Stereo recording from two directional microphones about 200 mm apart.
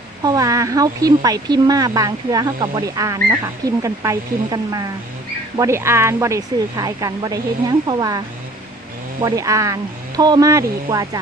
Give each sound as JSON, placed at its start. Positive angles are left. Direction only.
{"t": 0.2, "sound": "speech", "side_deg": -20}
{"t": 9.2, "sound": "speech", "side_deg": -15}